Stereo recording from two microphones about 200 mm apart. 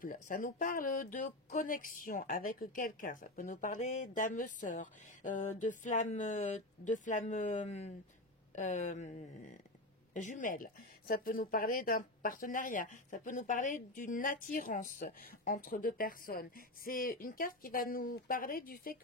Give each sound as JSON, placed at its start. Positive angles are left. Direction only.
{"t": 0.0, "sound": "speech", "side_deg": 45}